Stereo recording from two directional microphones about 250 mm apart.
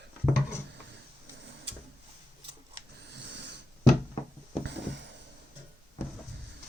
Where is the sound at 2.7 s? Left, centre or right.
Right.